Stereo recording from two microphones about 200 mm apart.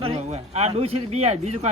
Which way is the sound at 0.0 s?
30° right (ahead or behind).